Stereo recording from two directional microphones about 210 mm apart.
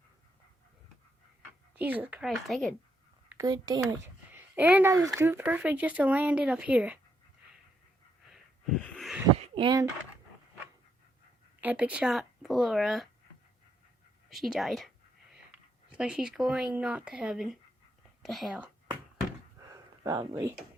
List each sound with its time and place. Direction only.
1.7 s speech: 10° right (ahead or behind)
3.2 s speech: 15° right (ahead or behind)
8.3 s wheeze: centre (ahead or behind)
9.4 s a sound: 25° right (ahead or behind)
11.6 s speech: 5° right (ahead or behind)
14.3 s speech: centre (ahead or behind)
19.7 s a sound: 15° right (ahead or behind)